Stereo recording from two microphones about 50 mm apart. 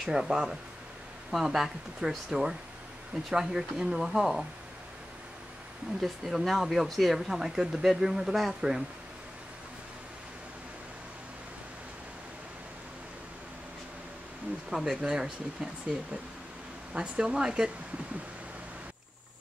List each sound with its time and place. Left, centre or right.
0.0 s speech: centre
5.9 s speech: centre
14.7 s speech: centre
16.9 s speech: centre